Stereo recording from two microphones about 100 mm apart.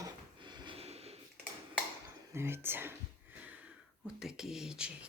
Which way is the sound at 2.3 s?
25° right (ahead or behind).